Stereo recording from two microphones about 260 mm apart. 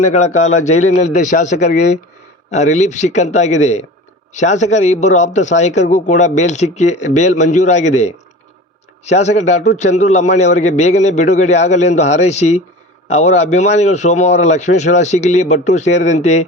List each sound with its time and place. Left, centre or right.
0.0 s speech: left